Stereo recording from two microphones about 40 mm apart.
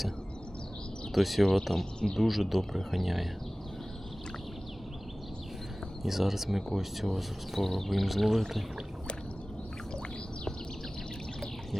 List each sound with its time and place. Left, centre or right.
1.1 s speech: centre
1.7 s speech: centre
2.1 s speech: centre
6.0 s speech: centre